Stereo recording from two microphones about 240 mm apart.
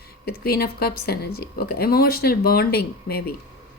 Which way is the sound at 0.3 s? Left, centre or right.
Left.